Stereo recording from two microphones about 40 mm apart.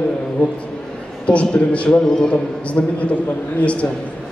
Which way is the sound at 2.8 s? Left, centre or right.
Left.